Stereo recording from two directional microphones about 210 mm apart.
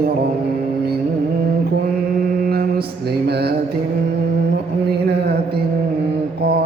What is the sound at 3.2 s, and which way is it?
Speech, 50° right (ahead or behind).